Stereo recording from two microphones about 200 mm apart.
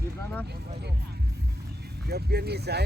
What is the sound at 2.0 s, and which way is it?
Speech, 50° right (ahead or behind).